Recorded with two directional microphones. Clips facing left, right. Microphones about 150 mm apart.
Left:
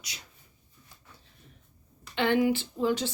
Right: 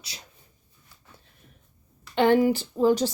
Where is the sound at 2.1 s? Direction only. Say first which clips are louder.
Right 5 dB; 40° right (ahead or behind).